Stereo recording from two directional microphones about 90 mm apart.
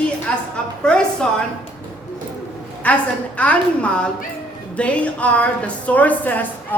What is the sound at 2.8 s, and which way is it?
A woman's voice, 15° left (ahead or behind).